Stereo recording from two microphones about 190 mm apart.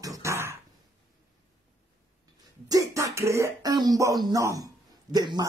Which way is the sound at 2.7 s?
15° right (ahead or behind).